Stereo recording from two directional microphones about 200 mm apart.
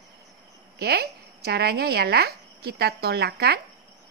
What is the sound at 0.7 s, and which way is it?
Speech, 55° right (ahead or behind).